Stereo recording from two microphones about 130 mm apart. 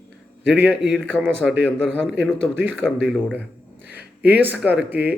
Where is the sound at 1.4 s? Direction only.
5° left (ahead or behind).